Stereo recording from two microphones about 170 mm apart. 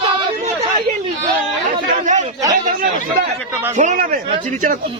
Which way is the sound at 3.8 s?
50° right (ahead or behind).